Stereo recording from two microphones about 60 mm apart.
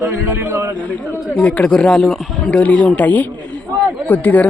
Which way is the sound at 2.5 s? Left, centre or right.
Left.